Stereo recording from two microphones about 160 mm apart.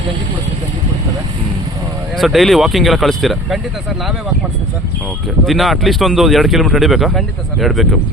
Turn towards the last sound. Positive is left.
turn(degrees=0)  # may be behind; listen again after turning